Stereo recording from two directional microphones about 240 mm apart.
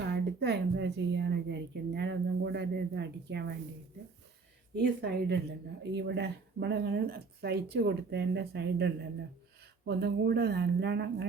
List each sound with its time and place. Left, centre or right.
0.0 s a woman's voice: right
4.8 s a woman's voice: right